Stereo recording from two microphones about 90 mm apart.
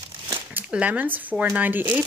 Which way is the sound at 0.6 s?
15° right (ahead or behind).